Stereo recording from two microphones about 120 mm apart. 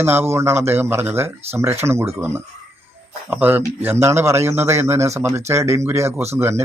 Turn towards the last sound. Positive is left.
turn(degrees=-20)  # may be behind; listen again after turning